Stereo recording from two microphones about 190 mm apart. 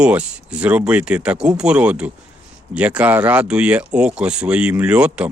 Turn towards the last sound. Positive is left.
turn(degrees=-5)  # may be behind; listen again after turning